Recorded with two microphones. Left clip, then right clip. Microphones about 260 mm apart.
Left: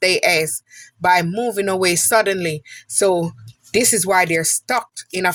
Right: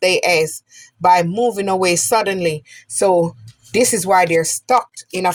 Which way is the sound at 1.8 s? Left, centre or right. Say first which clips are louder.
Left 1 dB; left.